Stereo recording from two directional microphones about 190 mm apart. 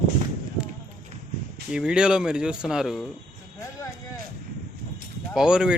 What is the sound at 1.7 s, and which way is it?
Speech, 5° right (ahead or behind).